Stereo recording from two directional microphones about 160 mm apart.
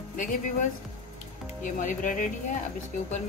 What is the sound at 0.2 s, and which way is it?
Speech, 55° left (ahead or behind).